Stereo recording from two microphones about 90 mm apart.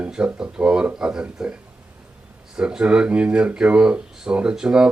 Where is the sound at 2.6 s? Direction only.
10° right (ahead or behind).